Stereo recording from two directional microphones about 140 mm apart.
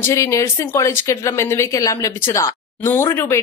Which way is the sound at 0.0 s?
20° left (ahead or behind).